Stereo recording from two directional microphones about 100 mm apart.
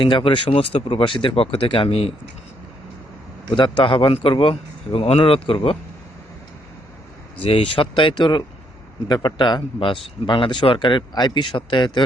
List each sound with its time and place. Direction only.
0.0 s a man's voice: 55° left (ahead or behind); by 2.1 s 80° left
3.5 s a man's voice: 55° left (ahead or behind)
7.4 s a man's voice: 70° left (ahead or behind); by 12.0 s 50° left (ahead or behind)